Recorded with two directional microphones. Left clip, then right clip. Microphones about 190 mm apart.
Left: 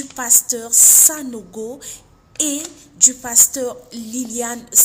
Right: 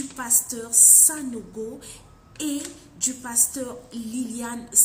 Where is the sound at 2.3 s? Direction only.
40° left (ahead or behind).